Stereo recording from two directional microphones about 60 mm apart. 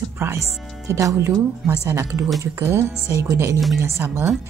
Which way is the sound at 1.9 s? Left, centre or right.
Right.